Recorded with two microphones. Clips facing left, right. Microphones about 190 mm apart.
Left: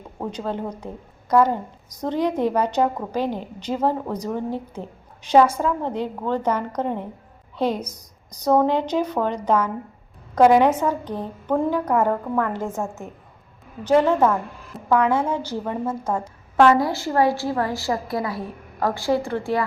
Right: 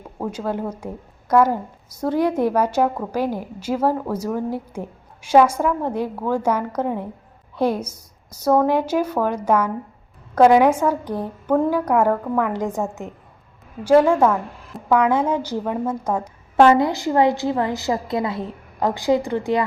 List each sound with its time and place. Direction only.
0.2 s a woman's voice: 10° right (ahead or behind)
11.5 s a woman's voice: centre (ahead or behind)
16.2 s a woman's voice: 25° right (ahead or behind)